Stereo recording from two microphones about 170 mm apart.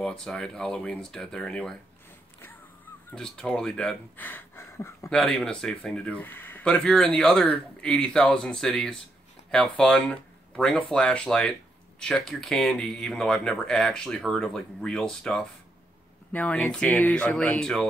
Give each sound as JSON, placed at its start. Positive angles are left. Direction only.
{"t": 0.0, "sound": "speech", "side_deg": 5}
{"t": 3.1, "sound": "speech", "side_deg": 5}
{"t": 5.2, "sound": "speech", "side_deg": 5}